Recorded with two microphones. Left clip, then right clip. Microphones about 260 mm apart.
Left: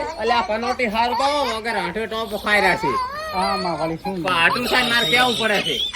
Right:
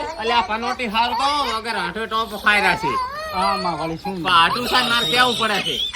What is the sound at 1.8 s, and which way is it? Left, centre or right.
Speech, centre.